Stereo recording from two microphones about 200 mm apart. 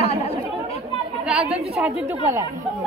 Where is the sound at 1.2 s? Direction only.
5° right (ahead or behind).